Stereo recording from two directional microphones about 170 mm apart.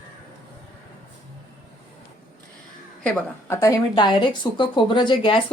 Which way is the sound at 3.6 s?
25° left (ahead or behind).